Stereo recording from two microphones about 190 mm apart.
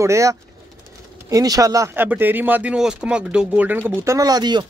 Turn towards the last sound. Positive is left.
turn(degrees=-20)  # may be behind; listen again after turning